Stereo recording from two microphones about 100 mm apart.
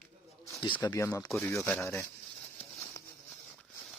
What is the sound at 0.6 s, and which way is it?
Speech, 55° left (ahead or behind).